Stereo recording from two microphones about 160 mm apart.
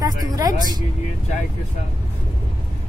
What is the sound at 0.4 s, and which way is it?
Speech, 25° right (ahead or behind).